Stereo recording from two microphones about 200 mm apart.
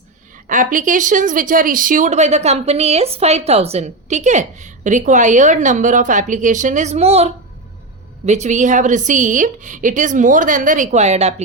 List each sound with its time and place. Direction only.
0.4 s speech: 40° right (ahead or behind)